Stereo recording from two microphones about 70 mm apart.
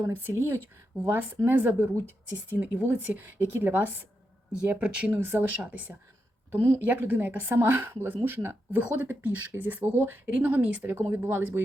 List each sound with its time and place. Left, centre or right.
0.0 s speech: right; by 5.1 s centre
5.2 s speech: right
5.5 s speech: right
6.5 s speech: right
6.7 s speech: right
8.8 s speech: right
10.9 s speech: right